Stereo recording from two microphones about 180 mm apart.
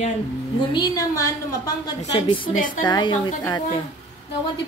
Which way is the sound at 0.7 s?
20° left (ahead or behind).